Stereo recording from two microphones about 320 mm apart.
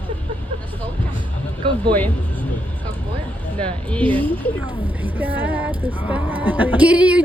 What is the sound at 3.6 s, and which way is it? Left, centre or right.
Speech, centre.